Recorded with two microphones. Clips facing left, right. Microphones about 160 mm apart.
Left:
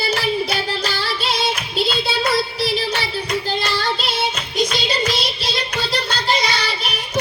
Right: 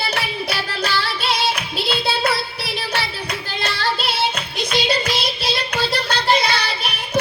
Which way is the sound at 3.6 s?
60° right (ahead or behind).